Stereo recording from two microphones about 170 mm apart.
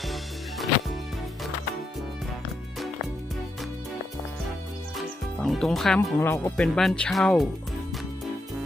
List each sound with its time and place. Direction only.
4.9 s music: centre (ahead or behind)
6.1 s speech: 15° left (ahead or behind)